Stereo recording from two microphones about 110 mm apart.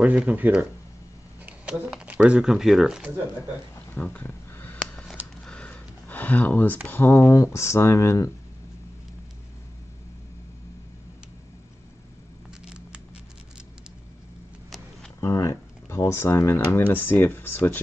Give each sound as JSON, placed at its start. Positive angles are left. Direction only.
{"t": 0.0, "sound": "speech", "side_deg": -10}
{"t": 3.9, "sound": "a sound", "side_deg": 15}
{"t": 6.9, "sound": "speech", "side_deg": 25}
{"t": 12.6, "sound": "patter", "side_deg": -10}
{"t": 15.1, "sound": "speech", "side_deg": 30}